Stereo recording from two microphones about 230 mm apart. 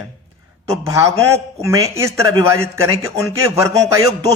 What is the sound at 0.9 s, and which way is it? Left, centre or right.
A man's voice, centre.